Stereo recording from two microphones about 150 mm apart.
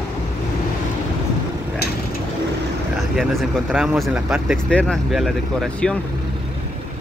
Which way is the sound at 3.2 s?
Centre (ahead or behind).